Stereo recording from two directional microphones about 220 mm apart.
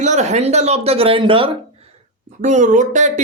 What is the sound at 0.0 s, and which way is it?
A man's voice, 30° right (ahead or behind).